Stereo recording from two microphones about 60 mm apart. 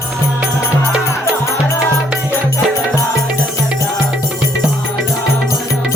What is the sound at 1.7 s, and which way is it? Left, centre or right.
Music, left.